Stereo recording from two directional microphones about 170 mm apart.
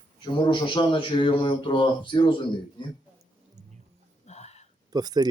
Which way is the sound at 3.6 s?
45° right (ahead or behind).